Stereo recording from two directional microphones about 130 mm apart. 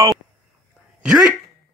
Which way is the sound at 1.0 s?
5° right (ahead or behind).